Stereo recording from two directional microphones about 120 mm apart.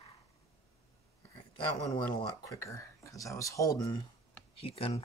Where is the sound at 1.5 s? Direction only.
40° left (ahead or behind).